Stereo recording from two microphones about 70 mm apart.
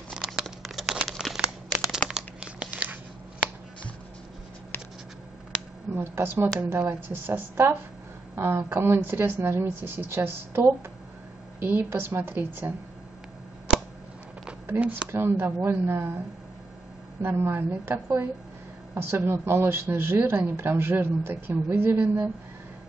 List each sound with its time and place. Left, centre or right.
0.1 s crumpling: centre
5.5 s a sound: centre
5.9 s speech: right
6.8 s a woman's voice: right
7.2 s speech: right
13.7 s a sound: centre
14.8 s a woman's voice: centre
15.0 s speech: right
17.2 s speech: right
18.9 s speech: right